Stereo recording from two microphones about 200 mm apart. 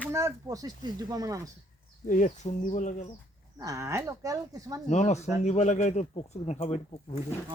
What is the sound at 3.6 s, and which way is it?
Speech, 15° right (ahead or behind).